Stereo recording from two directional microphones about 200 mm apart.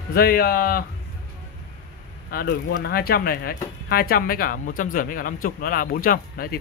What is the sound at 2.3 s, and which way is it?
Speech, 50° left (ahead or behind).